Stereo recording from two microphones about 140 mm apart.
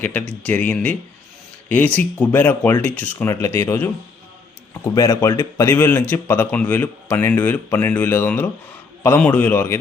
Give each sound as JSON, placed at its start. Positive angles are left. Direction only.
{"t": 0.0, "sound": "a man's voice", "side_deg": 10}